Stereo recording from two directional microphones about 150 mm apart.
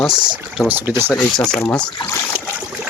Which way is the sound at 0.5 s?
10° right (ahead or behind).